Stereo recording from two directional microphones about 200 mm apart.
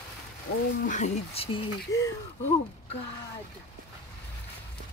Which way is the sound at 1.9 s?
15° left (ahead or behind).